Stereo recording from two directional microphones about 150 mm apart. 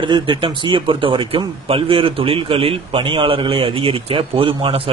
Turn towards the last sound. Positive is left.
turn(degrees=-35)  # may be behind; listen again after turning